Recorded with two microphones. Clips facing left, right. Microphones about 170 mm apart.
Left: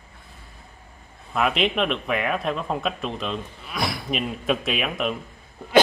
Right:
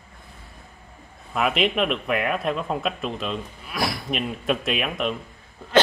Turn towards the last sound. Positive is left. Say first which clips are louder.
# even
turn(degrees=0)  # may be behind; listen again after turning